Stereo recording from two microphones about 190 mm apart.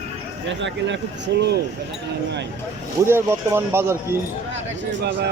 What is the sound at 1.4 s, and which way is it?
Speech, 60° right (ahead or behind).